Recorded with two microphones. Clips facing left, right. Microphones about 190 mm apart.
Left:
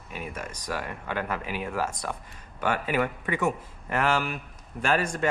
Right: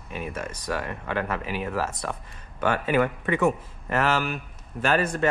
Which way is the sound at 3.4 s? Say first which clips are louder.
Right 4 dB; 10° left (ahead or behind).